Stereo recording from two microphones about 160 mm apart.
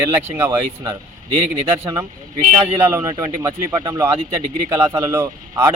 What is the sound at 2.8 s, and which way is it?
A man's voice, 15° right (ahead or behind).